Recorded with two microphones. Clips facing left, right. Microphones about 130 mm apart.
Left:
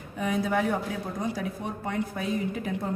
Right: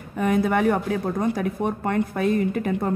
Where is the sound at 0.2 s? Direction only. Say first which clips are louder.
Right 6 dB; 60° right (ahead or behind).